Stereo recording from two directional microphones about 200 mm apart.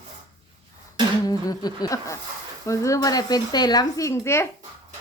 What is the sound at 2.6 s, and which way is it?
Speech, 15° left (ahead or behind).